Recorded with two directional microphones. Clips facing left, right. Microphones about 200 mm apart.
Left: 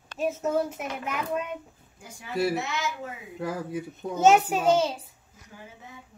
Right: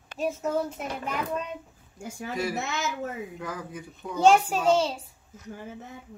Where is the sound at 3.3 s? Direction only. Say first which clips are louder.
Left 5 dB; 35° left (ahead or behind).